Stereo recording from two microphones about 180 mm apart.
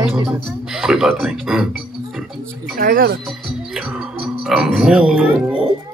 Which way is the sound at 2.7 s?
50° right (ahead or behind).